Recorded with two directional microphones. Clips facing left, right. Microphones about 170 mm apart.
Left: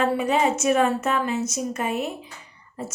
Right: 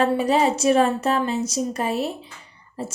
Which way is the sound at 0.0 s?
35° right (ahead or behind).